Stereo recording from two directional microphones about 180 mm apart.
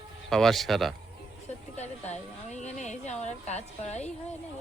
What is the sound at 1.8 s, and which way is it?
A woman's voice, 40° left (ahead or behind).